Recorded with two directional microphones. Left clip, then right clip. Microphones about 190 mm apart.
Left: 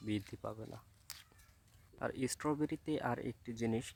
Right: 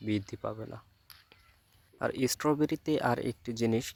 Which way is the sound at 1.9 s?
25° right (ahead or behind).